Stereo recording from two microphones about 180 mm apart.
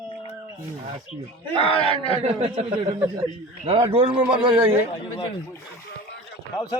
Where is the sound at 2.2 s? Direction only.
35° right (ahead or behind).